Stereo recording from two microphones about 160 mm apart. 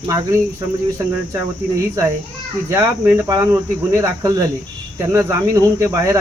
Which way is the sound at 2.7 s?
15° right (ahead or behind).